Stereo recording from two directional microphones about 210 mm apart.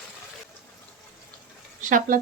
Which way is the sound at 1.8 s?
40° right (ahead or behind).